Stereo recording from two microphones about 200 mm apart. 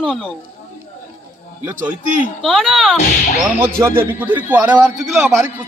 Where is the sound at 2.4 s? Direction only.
Centre (ahead or behind).